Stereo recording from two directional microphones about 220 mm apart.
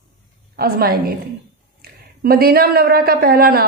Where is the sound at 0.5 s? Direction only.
40° right (ahead or behind).